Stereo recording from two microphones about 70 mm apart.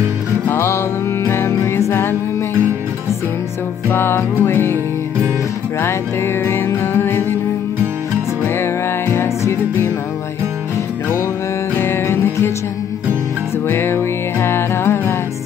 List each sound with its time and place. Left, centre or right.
0.5 s music: left
3.9 s music: left
5.8 s music: left
8.5 s music: left
11.7 s music: left
13.7 s music: left